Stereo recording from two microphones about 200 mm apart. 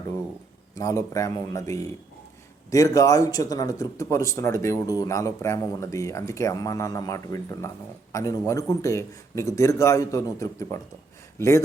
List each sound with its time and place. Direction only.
0.8 s speech: 15° left (ahead or behind)